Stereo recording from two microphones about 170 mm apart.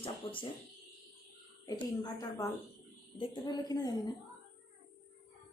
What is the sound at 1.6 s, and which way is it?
A woman's voice, 20° left (ahead or behind).